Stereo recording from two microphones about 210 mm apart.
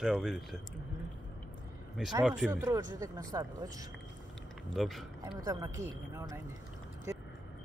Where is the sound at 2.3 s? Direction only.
10° right (ahead or behind).